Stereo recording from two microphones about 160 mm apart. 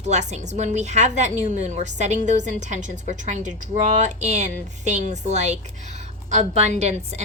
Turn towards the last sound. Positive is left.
turn(degrees=-45)  # may be behind; listen again after turning